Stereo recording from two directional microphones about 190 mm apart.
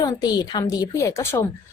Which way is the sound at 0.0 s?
20° left (ahead or behind).